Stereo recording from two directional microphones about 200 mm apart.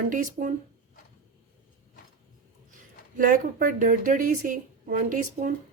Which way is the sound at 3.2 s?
40° right (ahead or behind).